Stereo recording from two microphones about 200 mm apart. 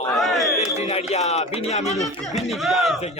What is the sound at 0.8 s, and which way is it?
Music, 35° left (ahead or behind).